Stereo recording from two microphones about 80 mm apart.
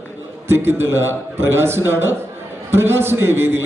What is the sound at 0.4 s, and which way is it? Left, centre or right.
A man's voice, right.